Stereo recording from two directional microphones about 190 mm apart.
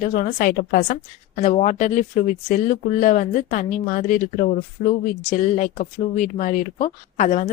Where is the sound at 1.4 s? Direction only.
35° left (ahead or behind).